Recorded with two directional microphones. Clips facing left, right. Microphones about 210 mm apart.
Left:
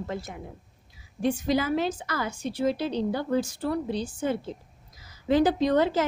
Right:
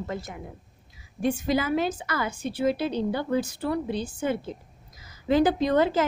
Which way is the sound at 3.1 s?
Centre (ahead or behind).